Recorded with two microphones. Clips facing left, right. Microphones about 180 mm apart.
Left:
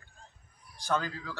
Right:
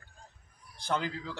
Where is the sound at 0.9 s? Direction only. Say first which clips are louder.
Left 1 dB; 20° right (ahead or behind).